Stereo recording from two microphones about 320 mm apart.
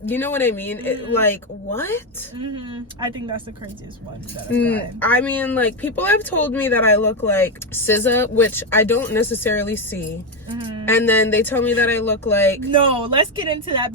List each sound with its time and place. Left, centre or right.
0.0 s speech: centre
4.6 s speech: centre
13.1 s speech: centre